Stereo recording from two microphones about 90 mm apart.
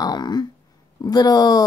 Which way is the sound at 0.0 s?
50° left (ahead or behind).